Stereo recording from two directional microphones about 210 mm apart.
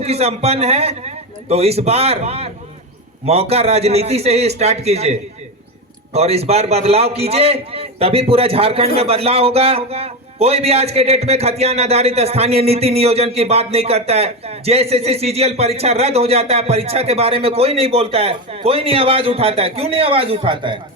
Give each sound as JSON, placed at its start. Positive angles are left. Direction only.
{"t": 0.0, "sound": "a man's voice", "side_deg": -30}
{"t": 6.1, "sound": "a man's voice", "side_deg": -30}